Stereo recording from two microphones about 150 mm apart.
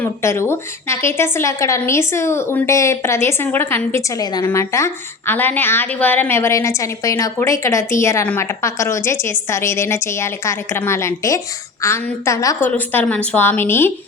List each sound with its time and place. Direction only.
0.0 s a woman's voice: 15° left (ahead or behind)